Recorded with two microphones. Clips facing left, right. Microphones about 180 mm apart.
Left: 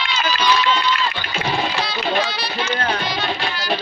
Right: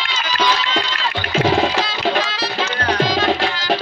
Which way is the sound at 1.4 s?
90° right.